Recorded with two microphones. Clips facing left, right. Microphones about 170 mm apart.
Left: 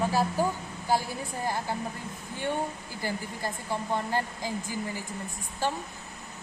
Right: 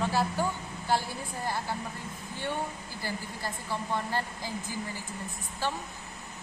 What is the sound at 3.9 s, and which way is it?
Speech, 15° left (ahead or behind).